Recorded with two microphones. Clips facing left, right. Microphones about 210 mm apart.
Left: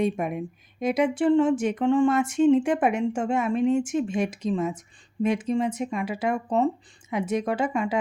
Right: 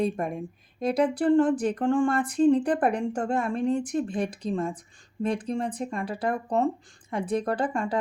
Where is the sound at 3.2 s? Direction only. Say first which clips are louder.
Left 4 dB; centre (ahead or behind).